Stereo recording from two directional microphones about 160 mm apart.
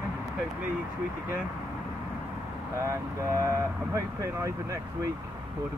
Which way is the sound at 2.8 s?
20° right (ahead or behind).